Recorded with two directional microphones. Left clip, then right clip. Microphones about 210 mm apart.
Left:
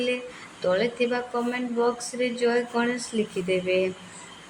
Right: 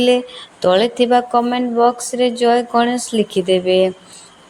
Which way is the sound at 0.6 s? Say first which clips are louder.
Right 10 dB; 30° right (ahead or behind).